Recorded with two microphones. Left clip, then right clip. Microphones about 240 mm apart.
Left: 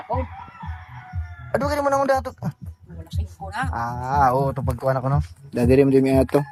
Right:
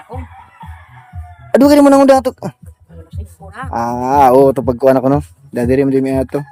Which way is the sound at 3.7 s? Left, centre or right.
Right.